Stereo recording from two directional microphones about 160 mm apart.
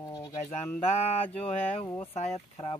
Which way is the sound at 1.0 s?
40° left (ahead or behind).